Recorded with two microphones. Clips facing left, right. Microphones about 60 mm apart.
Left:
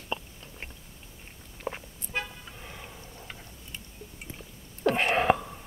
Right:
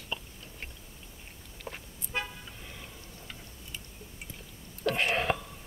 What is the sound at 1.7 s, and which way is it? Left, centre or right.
Car, left.